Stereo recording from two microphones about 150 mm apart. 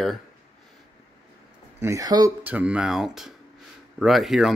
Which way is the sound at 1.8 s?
20° right (ahead or behind).